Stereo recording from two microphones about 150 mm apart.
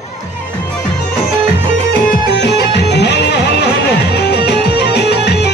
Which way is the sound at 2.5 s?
90° left.